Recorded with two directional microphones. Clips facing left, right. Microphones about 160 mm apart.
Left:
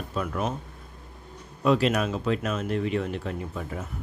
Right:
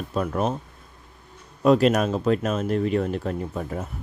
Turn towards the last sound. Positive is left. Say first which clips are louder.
# right 4 dB
turn(degrees=-40)  # may be behind; listen again after turning